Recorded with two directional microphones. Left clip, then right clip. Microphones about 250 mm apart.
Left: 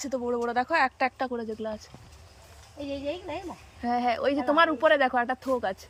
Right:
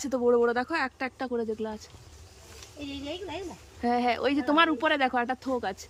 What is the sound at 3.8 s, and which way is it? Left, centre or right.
Speech, centre.